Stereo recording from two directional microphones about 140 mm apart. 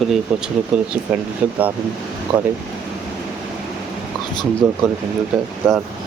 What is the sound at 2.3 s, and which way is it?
Speech, 10° right (ahead or behind).